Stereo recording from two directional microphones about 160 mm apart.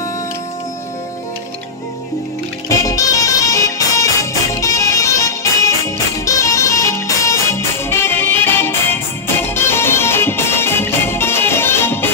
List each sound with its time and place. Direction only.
2.7 s music: 20° left (ahead or behind)